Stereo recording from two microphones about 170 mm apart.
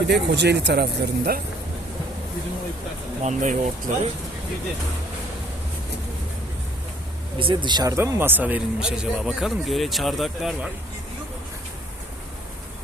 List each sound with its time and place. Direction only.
0.1 s speech: 85° right; by 1.4 s 70° right (ahead or behind)
3.2 s speech: 45° right (ahead or behind)
7.3 s speech: 30° right (ahead or behind); by 10.7 s centre (ahead or behind)